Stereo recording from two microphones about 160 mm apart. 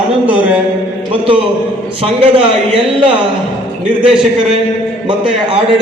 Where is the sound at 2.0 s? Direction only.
35° right (ahead or behind).